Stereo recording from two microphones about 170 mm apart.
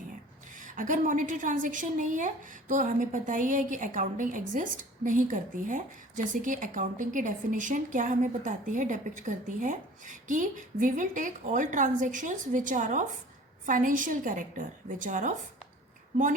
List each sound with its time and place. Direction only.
0.6 s a woman's voice: 50° right (ahead or behind)